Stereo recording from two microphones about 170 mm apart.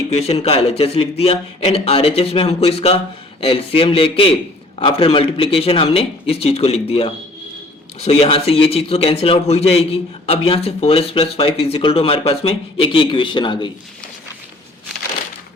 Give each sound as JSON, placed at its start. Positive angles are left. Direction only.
{"t": 0.1, "sound": "a man's voice", "side_deg": 35}